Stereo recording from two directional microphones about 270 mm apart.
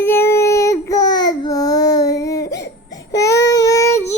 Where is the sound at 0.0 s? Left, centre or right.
Centre.